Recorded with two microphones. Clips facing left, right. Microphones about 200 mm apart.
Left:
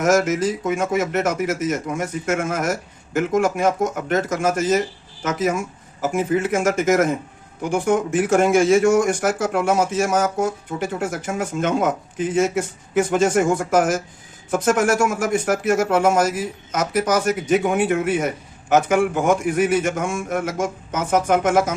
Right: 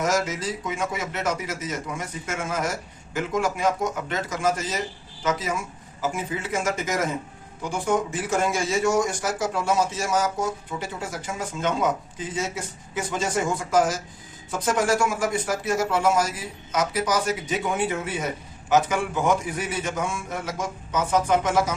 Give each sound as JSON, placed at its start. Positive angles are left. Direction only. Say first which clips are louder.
{"t": 0.0, "sound": "speech", "louder": "left 7 dB", "side_deg": 50}